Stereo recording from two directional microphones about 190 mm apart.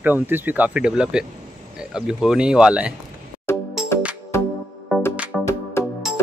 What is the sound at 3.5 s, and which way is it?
Music, 15° left (ahead or behind).